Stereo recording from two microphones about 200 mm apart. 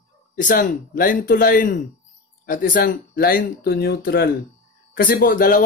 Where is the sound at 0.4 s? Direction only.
40° left (ahead or behind).